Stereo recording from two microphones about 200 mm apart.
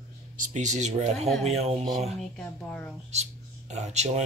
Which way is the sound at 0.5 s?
35° right (ahead or behind).